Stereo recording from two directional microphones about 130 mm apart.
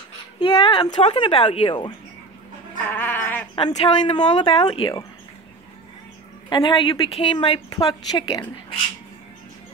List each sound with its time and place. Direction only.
0.4 s speech: 40° left (ahead or behind)
2.9 s goat: 15° left (ahead or behind)
3.5 s speech: 40° left (ahead or behind)
6.5 s a woman's voice: 40° left (ahead or behind)
7.7 s speech: 30° left (ahead or behind)